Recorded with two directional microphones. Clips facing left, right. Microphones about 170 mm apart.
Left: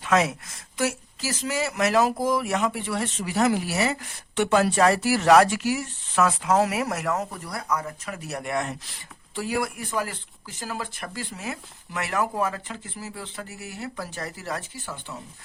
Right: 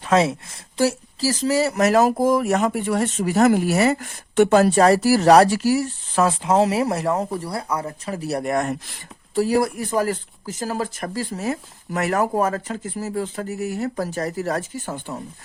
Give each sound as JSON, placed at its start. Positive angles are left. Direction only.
{"t": 0.0, "sound": "a woman's voice", "side_deg": -30}